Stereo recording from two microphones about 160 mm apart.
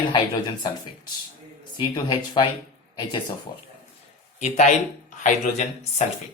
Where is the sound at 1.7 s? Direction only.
30° left (ahead or behind).